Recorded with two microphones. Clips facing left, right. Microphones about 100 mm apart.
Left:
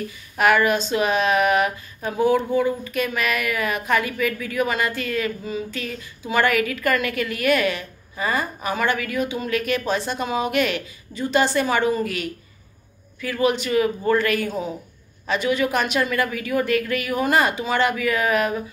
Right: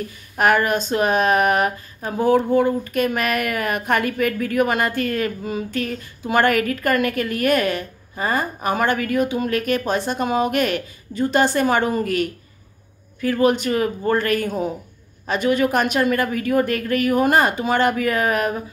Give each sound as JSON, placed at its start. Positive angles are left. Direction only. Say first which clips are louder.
{"t": 0.4, "sound": "speech", "louder": "even", "side_deg": -45}